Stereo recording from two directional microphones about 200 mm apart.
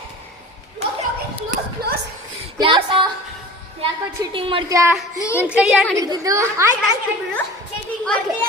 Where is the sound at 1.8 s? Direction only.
50° right (ahead or behind).